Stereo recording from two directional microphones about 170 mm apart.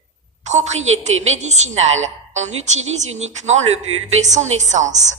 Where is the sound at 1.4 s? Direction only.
45° right (ahead or behind).